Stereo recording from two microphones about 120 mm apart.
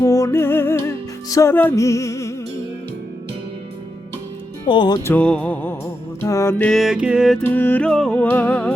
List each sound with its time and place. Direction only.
0.0 s music: 25° left (ahead or behind)
4.6 s speech: 40° left (ahead or behind)
5.0 s music: 10° left (ahead or behind)
6.6 s music: 5° left (ahead or behind)
7.4 s music: 15° left (ahead or behind)